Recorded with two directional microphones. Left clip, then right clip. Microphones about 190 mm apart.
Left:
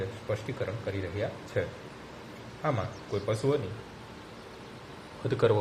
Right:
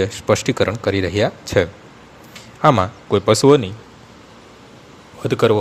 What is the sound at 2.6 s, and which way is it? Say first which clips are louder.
Speech: right 18 dB; 65° right (ahead or behind).